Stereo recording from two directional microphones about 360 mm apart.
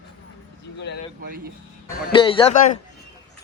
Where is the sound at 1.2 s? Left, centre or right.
Right.